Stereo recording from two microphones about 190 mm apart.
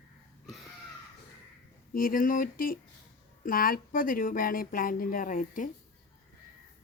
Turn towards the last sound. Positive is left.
turn(degrees=45)  # may be behind; listen again after turning